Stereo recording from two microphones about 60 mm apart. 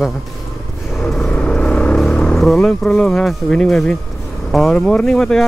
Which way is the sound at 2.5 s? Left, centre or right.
Centre.